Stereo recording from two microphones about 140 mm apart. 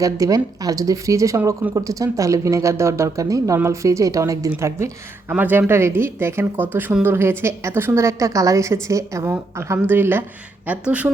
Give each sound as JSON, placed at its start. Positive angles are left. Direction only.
{"t": 0.0, "sound": "speech", "side_deg": -25}